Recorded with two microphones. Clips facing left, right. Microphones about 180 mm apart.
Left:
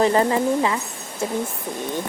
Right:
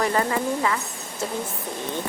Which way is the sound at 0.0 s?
25° left (ahead or behind).